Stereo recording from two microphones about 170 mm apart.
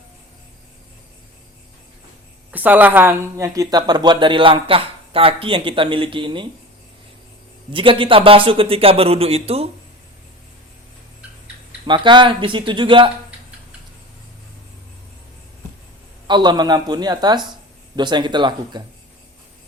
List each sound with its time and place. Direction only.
2.5 s speech: 10° right (ahead or behind); by 6.5 s 30° right (ahead or behind)
7.7 s a man's voice: 30° right (ahead or behind)
11.9 s speech: 30° right (ahead or behind)
16.2 s speech: 25° right (ahead or behind)